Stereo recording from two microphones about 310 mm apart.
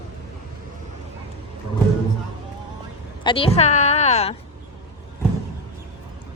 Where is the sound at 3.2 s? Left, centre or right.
Centre.